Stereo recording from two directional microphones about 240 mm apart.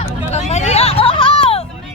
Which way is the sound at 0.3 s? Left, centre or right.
Left.